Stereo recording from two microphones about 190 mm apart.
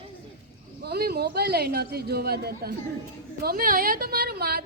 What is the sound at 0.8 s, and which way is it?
A woman's voice, 55° right (ahead or behind).